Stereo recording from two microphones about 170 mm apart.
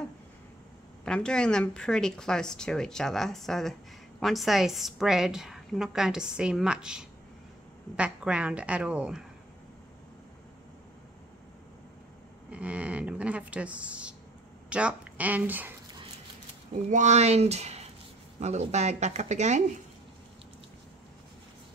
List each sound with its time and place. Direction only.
1.0 s a woman's voice: 5° left (ahead or behind)
12.5 s a woman's voice: 5° right (ahead or behind)
16.9 s speech: 45° right (ahead or behind)